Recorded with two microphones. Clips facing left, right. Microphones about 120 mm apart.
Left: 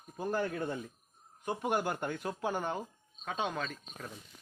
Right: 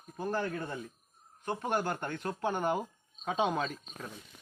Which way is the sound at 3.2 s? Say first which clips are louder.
Right 5 dB; 15° right (ahead or behind).